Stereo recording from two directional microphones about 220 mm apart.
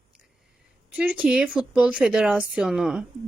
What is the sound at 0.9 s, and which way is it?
Speech, 5° right (ahead or behind).